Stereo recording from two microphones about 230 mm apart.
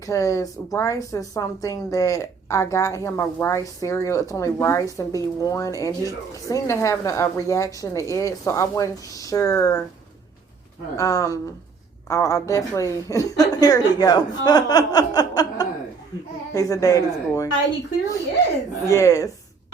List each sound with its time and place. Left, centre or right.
0.0 s speech: centre
10.9 s speech: centre
18.9 s speech: centre